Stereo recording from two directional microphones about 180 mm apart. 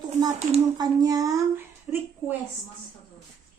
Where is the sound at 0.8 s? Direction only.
20° right (ahead or behind).